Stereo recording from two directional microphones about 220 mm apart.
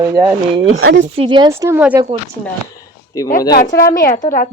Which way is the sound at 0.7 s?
65° right (ahead or behind).